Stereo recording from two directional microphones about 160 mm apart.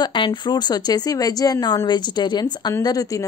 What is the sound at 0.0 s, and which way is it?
A woman's voice, 30° left (ahead or behind).